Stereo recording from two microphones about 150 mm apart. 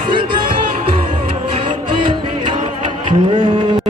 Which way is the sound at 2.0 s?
35° right (ahead or behind).